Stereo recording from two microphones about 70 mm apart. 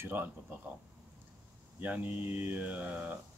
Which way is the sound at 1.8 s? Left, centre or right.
Right.